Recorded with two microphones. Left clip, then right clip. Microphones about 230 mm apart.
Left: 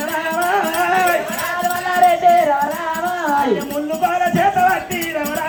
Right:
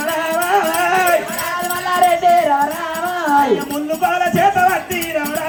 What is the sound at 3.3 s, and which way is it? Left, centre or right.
Music, right.